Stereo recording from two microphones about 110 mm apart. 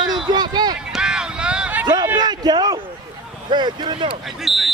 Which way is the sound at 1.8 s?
40° right (ahead or behind).